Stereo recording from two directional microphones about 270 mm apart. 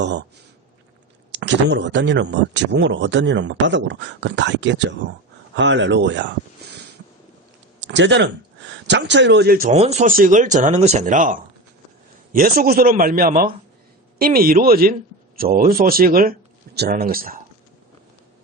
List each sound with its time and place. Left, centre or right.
0.0 s speech: right
1.3 s speech: right